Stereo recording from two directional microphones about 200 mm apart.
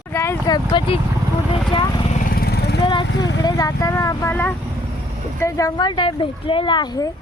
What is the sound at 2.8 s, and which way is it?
Speech, 25° left (ahead or behind).